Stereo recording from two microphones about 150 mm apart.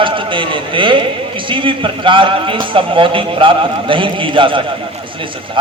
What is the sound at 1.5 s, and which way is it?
A man's voice, 35° right (ahead or behind).